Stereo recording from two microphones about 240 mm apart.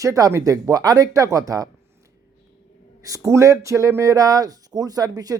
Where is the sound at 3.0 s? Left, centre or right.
Centre.